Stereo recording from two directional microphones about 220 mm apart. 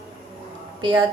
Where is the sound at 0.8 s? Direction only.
20° right (ahead or behind).